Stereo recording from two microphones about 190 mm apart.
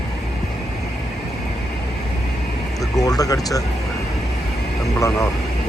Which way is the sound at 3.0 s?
20° left (ahead or behind).